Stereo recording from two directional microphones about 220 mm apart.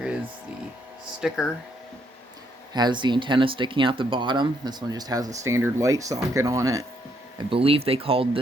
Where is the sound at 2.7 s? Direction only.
20° right (ahead or behind).